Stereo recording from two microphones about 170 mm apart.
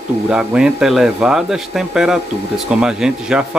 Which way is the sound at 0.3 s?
5° right (ahead or behind).